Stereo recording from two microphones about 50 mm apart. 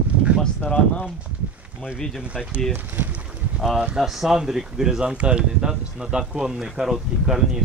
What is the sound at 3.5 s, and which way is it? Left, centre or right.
Speech, centre.